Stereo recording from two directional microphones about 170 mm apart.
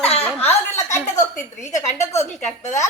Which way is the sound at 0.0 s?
35° left (ahead or behind).